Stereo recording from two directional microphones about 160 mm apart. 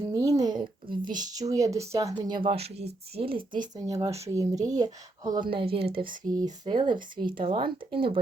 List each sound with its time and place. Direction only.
0.1 s speech: 20° right (ahead or behind)